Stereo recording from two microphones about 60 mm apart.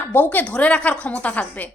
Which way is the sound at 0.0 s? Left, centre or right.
Left.